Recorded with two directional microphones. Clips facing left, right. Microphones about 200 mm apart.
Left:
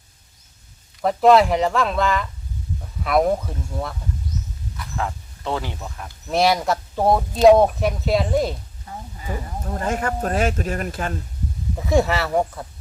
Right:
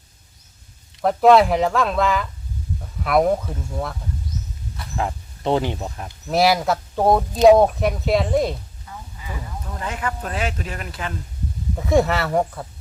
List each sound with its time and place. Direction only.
1.0 s speech: centre (ahead or behind)
4.9 s speech: 20° right (ahead or behind)
6.2 s speech: centre (ahead or behind)
8.9 s speech: 40° left (ahead or behind)
11.8 s speech: centre (ahead or behind)